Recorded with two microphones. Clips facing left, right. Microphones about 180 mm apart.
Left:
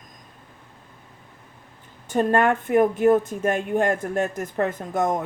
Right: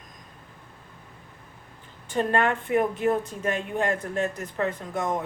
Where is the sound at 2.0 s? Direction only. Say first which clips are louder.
Left 4 dB; 45° left (ahead or behind).